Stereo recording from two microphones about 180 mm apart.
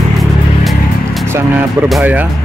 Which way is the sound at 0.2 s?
Centre (ahead or behind).